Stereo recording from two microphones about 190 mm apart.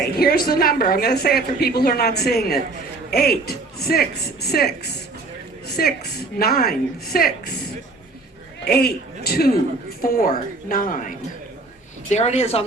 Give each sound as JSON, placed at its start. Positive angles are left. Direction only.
{"t": 0.2, "sound": "a woman's voice", "side_deg": 50}
{"t": 8.6, "sound": "a woman's voice", "side_deg": 55}
{"t": 12.1, "sound": "speech", "side_deg": 35}